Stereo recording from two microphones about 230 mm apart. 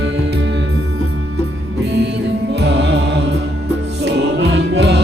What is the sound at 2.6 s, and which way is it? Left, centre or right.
Music, right.